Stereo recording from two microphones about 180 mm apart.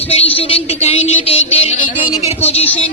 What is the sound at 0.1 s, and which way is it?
A woman's voice, 35° left (ahead or behind).